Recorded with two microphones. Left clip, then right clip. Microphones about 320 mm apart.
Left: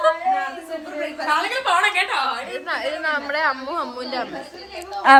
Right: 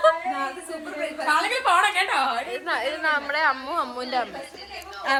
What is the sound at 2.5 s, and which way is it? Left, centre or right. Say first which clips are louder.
A woman's voice: left 1 dB; centre.